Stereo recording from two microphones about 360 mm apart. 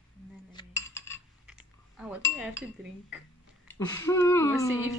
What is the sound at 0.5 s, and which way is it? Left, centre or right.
Cutlery, centre.